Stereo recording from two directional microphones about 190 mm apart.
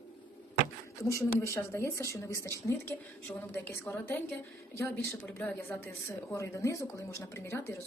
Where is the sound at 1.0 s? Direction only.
15° left (ahead or behind).